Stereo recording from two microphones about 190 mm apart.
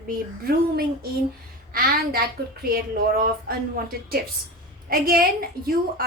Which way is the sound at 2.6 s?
50° right (ahead or behind).